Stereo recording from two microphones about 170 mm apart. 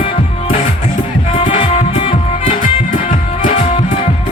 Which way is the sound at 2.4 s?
50° left (ahead or behind).